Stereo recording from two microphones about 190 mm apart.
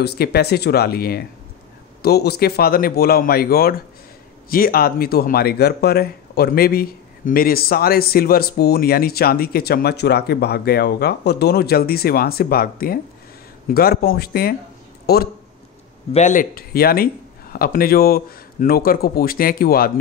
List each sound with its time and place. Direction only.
0.0 s speech: 55° left (ahead or behind)
16.1 s speech: 40° left (ahead or behind)